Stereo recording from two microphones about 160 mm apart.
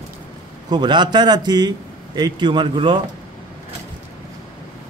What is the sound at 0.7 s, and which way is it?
A man's voice, 25° right (ahead or behind).